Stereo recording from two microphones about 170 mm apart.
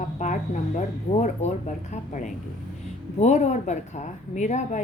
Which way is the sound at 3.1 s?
40° left (ahead or behind).